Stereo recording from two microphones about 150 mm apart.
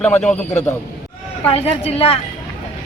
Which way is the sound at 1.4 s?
40° left (ahead or behind).